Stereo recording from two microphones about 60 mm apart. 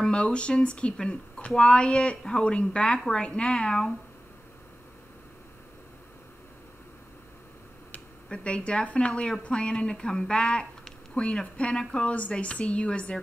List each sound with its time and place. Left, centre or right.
0.0 s a woman's voice: centre
8.3 s a woman's voice: centre